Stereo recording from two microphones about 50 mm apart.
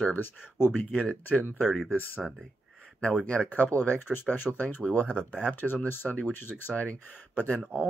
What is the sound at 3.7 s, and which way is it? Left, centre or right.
Speech, left.